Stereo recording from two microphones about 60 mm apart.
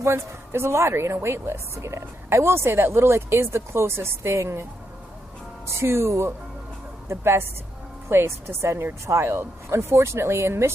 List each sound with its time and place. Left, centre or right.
0.0 s a woman's voice: right
5.7 s a woman's voice: right